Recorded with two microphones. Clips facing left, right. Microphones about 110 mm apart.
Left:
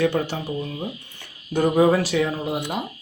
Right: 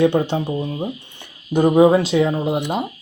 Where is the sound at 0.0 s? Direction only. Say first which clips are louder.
Right 5 dB; 25° right (ahead or behind).